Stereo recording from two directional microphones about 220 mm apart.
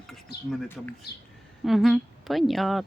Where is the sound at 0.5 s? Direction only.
10° left (ahead or behind).